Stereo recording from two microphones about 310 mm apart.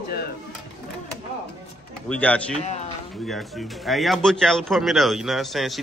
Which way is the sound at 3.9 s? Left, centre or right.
Centre.